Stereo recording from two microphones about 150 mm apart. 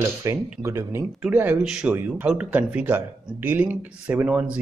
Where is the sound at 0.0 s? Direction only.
20° right (ahead or behind).